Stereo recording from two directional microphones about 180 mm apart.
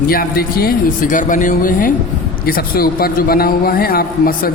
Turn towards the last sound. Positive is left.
turn(degrees=55)  # may be behind; listen again after turning